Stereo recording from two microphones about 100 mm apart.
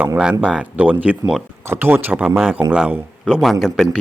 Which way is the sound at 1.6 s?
20° right (ahead or behind).